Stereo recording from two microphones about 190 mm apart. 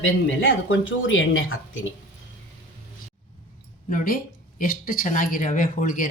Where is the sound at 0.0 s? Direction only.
90° left.